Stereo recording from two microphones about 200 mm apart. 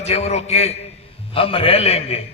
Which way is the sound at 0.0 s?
30° left (ahead or behind).